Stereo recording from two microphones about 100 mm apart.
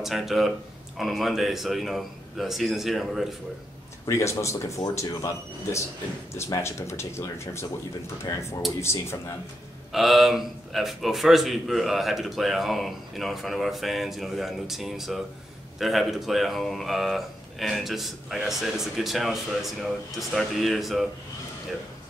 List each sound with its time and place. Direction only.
0.0 s speech: centre (ahead or behind)
4.0 s speech: 30° left (ahead or behind)
9.9 s speech: centre (ahead or behind)